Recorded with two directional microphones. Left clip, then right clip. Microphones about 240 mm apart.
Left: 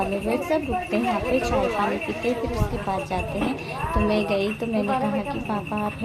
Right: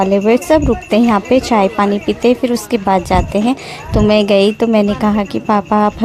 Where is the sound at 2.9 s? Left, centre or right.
Right.